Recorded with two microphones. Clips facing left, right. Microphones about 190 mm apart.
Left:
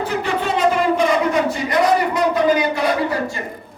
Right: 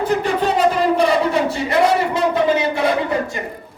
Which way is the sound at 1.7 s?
25° right (ahead or behind).